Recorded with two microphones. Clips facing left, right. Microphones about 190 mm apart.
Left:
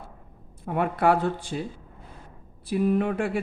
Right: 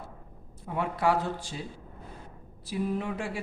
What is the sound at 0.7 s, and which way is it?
Speech, 60° left (ahead or behind).